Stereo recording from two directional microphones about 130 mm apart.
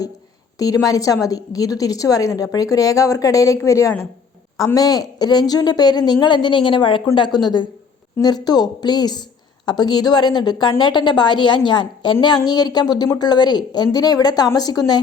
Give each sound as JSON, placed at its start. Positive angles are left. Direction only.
{"t": 0.6, "sound": "a woman's voice", "side_deg": 30}